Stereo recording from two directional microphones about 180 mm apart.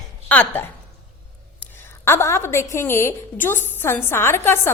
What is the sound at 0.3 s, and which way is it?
Speech, 10° left (ahead or behind).